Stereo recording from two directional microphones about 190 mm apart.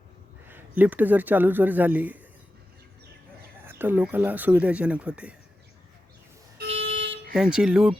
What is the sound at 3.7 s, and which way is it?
Speech, 10° right (ahead or behind).